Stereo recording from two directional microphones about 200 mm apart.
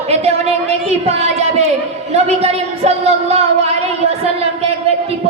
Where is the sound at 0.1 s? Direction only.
30° right (ahead or behind).